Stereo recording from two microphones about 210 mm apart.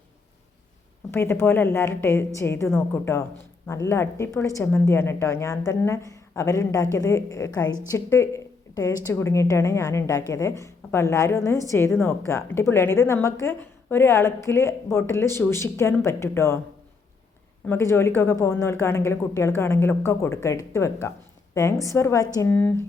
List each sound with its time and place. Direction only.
1.1 s a woman's voice: 10° left (ahead or behind)
17.7 s a woman's voice: 10° left (ahead or behind)